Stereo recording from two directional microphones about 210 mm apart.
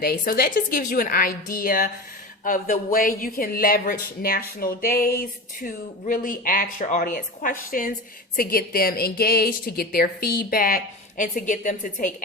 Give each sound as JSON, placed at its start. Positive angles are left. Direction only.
{"t": 0.0, "sound": "a woman's voice", "side_deg": 45}